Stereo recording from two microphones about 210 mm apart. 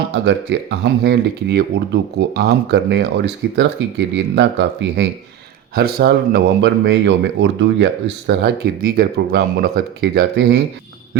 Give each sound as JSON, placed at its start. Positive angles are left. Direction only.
{"t": 0.3, "sound": "speech", "side_deg": -55}
{"t": 5.7, "sound": "speech", "side_deg": -45}